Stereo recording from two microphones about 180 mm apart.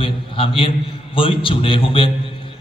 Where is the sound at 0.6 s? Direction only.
30° left (ahead or behind).